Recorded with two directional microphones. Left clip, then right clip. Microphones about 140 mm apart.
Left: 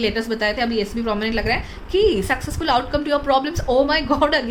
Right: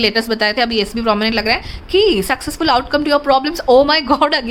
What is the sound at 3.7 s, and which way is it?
Speech, 60° right (ahead or behind).